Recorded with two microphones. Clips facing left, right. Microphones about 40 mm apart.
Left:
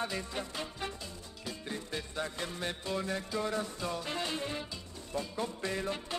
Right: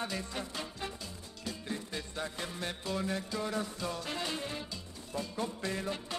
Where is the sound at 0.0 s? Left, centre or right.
Centre.